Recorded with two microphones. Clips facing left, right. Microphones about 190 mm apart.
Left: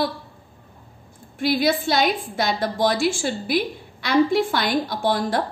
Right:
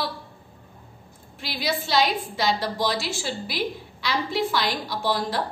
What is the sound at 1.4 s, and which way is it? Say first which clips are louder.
A woman's voice: left 9 dB; 50° left (ahead or behind).